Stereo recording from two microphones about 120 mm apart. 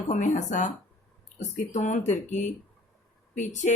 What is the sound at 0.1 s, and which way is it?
Speech, 90° left.